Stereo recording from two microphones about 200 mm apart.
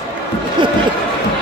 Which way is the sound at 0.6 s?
25° right (ahead or behind).